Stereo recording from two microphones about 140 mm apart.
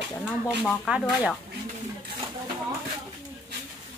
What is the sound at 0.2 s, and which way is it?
Speech, 5° right (ahead or behind).